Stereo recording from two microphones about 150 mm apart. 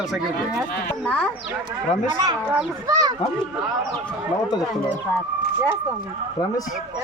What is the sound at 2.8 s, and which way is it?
Speech, 25° right (ahead or behind).